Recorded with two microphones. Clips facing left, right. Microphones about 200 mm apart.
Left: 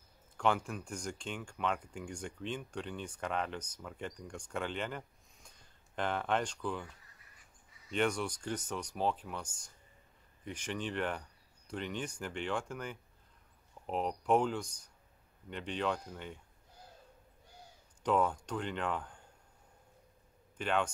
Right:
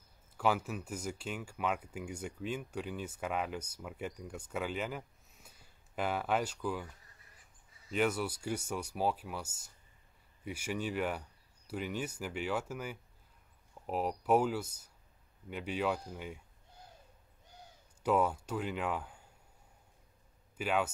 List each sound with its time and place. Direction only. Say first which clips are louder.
0.4 s speech: even; 5° right (ahead or behind)
7.9 s speech: right 1 dB; 5° right (ahead or behind)
18.0 s speech: right 1 dB; 5° right (ahead or behind)
20.5 s speech: even; 5° right (ahead or behind)